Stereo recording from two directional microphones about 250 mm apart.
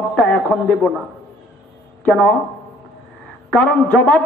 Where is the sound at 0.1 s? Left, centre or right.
Centre.